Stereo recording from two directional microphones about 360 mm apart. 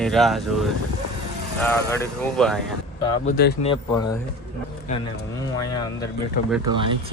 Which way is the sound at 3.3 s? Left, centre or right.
Left.